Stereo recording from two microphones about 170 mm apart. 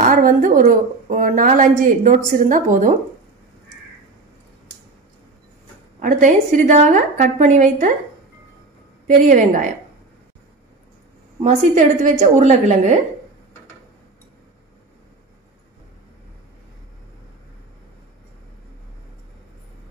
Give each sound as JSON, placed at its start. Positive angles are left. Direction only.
{"t": 0.0, "sound": "a woman's voice", "side_deg": -50}
{"t": 5.9, "sound": "a woman's voice", "side_deg": -50}
{"t": 9.0, "sound": "a woman's voice", "side_deg": -50}
{"t": 11.4, "sound": "a woman's voice", "side_deg": -50}